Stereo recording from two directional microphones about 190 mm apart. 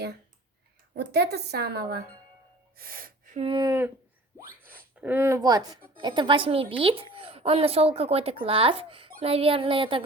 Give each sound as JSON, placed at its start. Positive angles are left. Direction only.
{"t": 0.9, "sound": "a woman's voice", "side_deg": -60}
{"t": 2.7, "sound": "gasp", "side_deg": -50}
{"t": 3.5, "sound": "speech", "side_deg": -20}
{"t": 4.9, "sound": "speech", "side_deg": -10}